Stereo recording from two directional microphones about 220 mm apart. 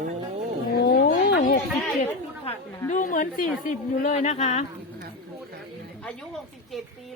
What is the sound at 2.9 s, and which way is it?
A woman's voice, 35° left (ahead or behind).